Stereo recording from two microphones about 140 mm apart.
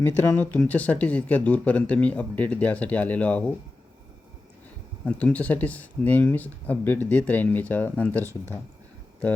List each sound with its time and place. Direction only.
0.0 s speech: 15° left (ahead or behind)
5.0 s speech: 10° left (ahead or behind)
8.2 s speech: 20° right (ahead or behind)